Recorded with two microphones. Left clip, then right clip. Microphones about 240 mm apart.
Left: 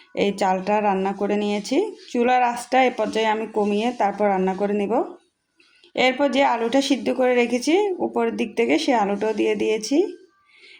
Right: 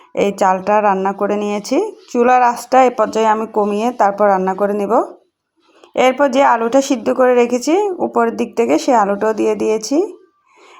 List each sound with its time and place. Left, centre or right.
0.1 s speech: centre